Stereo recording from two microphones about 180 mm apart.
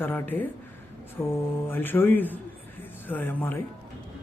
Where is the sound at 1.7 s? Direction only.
10° left (ahead or behind).